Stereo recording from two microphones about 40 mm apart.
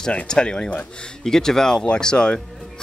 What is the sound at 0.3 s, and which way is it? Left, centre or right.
Mechanisms, left.